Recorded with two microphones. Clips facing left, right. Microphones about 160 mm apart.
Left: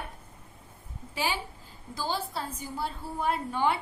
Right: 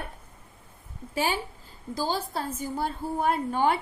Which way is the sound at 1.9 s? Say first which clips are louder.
Right 3 dB; 45° right (ahead or behind).